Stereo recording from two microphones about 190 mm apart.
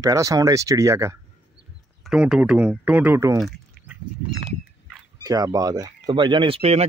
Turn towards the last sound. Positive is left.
turn(degrees=-30)  # may be behind; listen again after turning